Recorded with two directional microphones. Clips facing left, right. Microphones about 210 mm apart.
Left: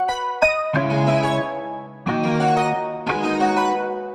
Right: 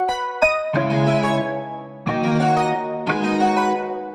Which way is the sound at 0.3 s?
Centre (ahead or behind).